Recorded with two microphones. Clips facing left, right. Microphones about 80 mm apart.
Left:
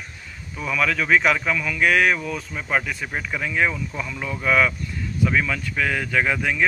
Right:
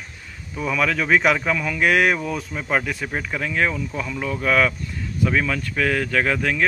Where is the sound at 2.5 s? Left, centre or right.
Centre.